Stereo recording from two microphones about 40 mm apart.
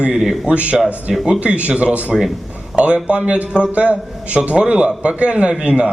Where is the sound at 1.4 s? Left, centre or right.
Right.